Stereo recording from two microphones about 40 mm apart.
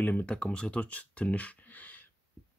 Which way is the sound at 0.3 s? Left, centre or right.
Left.